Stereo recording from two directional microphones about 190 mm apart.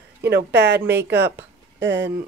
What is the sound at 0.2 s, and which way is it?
A woman's voice, 60° right (ahead or behind).